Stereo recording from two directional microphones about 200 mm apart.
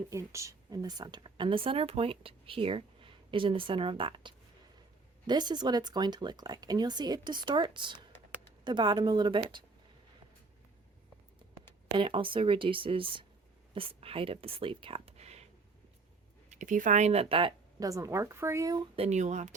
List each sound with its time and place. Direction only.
0.1 s speech: 15° right (ahead or behind)
11.9 s speech: 25° right (ahead or behind)
16.5 s speech: 40° right (ahead or behind)